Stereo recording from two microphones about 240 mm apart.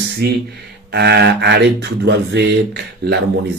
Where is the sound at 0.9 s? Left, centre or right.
Right.